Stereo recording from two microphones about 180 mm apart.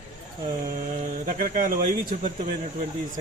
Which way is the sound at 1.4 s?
45° right (ahead or behind).